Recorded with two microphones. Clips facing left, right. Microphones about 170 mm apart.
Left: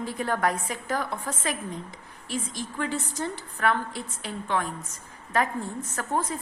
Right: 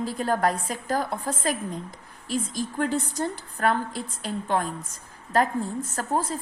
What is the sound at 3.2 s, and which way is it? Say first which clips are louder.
A woman's voice: even; 40° right (ahead or behind).